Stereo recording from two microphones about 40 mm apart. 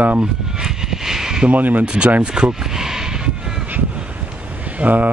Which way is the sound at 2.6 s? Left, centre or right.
Centre.